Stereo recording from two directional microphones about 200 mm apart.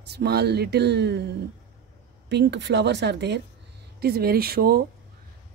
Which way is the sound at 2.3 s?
60° right (ahead or behind).